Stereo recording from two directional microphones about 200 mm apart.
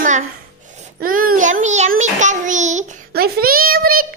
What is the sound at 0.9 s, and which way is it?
A child's voice, 45° right (ahead or behind).